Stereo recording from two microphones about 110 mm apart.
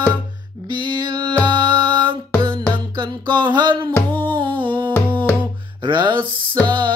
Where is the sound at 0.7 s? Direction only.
45° right (ahead or behind).